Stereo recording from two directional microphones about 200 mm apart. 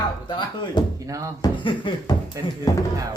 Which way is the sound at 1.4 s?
20° left (ahead or behind).